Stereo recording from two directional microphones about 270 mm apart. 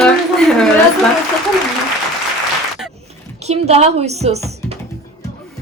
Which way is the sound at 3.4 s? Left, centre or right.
Right.